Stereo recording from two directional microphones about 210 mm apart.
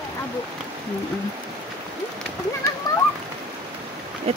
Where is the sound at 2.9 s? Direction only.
20° left (ahead or behind).